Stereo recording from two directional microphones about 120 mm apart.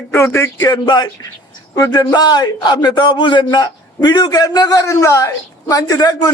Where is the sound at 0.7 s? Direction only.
35° left (ahead or behind).